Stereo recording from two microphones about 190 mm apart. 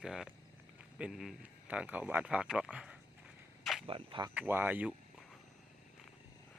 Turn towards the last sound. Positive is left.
turn(degrees=-10)  # may be behind; listen again after turning